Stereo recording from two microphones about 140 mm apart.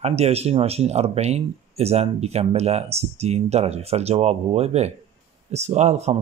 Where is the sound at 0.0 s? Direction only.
50° right (ahead or behind).